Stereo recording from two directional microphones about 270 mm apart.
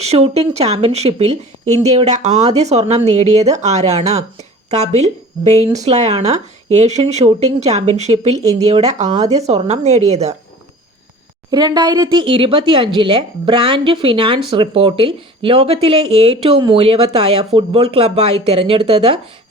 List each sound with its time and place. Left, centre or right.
0.0 s speech: right
9.2 s speech: centre
9.5 s speech: right
11.5 s speech: centre